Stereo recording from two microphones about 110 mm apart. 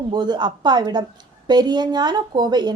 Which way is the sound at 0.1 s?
40° right (ahead or behind).